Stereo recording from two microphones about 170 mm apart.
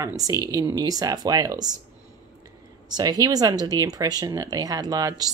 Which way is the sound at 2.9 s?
20° right (ahead or behind).